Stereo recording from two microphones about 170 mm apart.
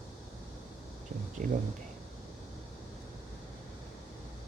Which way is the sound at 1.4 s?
55° right (ahead or behind).